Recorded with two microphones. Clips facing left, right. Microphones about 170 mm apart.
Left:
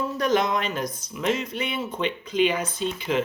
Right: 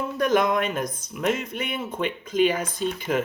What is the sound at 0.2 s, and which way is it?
Speech, 50° right (ahead or behind).